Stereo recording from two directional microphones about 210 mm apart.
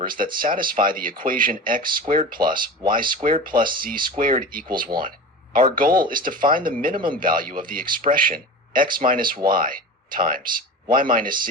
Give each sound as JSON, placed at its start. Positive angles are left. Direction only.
{"t": 0.0, "sound": "speech", "side_deg": -40}